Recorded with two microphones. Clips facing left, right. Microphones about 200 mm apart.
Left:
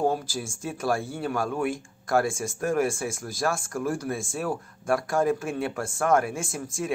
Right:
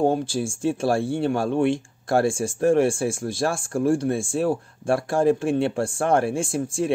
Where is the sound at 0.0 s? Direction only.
30° right (ahead or behind).